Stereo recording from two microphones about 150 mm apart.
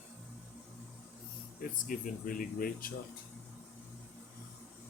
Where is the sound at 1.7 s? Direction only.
65° left (ahead or behind).